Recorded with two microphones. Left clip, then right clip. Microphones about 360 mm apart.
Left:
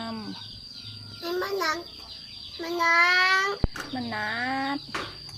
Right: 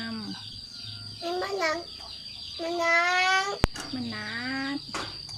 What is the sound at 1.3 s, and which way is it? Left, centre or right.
Child singing, centre.